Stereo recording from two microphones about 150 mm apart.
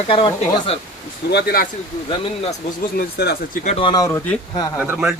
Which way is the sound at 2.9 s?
85° left.